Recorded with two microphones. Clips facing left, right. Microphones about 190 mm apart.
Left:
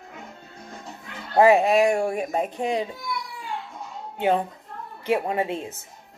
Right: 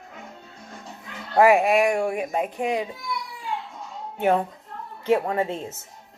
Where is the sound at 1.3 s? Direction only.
25° left (ahead or behind).